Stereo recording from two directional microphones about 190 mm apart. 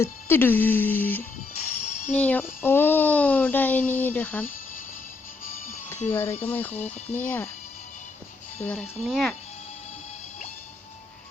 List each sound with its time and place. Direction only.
0.0 s speech: 10° left (ahead or behind)
1.7 s music: 40° left (ahead or behind)
2.1 s speech: 10° left (ahead or behind)
6.1 s speech: 10° left (ahead or behind)
8.6 s speech: 5° left (ahead or behind)